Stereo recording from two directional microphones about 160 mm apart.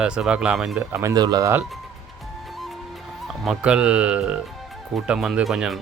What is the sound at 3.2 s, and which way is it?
Speech, centre (ahead or behind).